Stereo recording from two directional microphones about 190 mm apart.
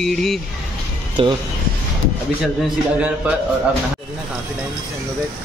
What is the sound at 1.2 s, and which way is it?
Speech, 30° right (ahead or behind).